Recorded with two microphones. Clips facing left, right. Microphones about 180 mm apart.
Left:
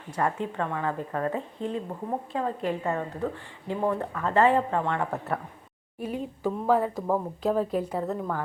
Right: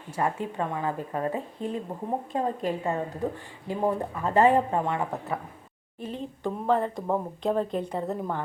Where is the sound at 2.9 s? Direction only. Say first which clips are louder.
Even; 20° right (ahead or behind).